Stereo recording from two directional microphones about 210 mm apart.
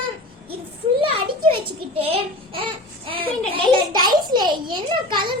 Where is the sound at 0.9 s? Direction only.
25° right (ahead or behind).